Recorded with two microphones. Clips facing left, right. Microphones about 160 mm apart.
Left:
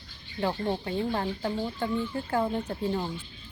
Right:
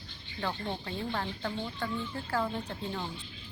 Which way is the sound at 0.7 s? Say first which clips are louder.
Left 7 dB; 25° left (ahead or behind).